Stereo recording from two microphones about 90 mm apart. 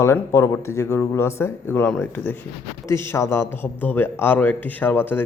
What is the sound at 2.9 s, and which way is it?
A man's voice, 30° left (ahead or behind).